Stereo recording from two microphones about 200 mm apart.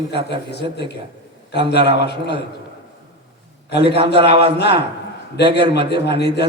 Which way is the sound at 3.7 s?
55° left (ahead or behind).